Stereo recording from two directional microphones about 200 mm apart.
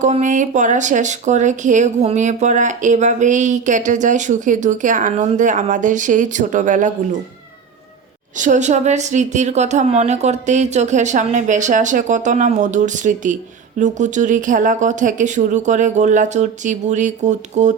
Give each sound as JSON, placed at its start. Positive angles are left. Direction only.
{"t": 0.0, "sound": "speech", "side_deg": -40}
{"t": 8.4, "sound": "speech", "side_deg": -40}